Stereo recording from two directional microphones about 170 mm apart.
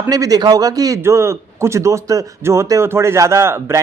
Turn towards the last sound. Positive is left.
turn(degrees=-15)  # may be behind; listen again after turning